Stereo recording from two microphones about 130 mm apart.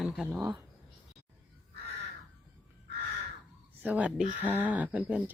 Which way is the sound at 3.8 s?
10° right (ahead or behind).